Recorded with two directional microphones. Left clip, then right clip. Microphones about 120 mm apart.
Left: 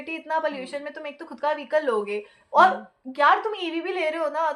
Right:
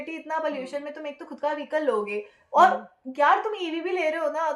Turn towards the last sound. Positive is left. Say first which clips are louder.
# left 1 dB
turn(degrees=10)  # may be behind; listen again after turning